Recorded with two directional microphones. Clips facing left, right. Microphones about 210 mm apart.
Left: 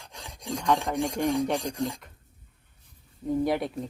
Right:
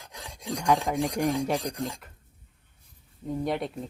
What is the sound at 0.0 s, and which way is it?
Filing, centre (ahead or behind).